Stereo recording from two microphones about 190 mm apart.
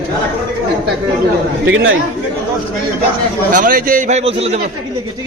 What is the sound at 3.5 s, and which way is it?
A man's voice, 45° right (ahead or behind).